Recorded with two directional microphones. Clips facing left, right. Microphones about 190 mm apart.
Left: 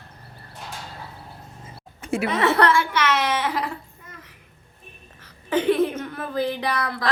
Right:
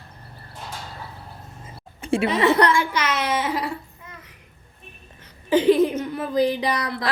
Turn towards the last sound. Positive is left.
turn(degrees=-15)  # may be behind; listen again after turning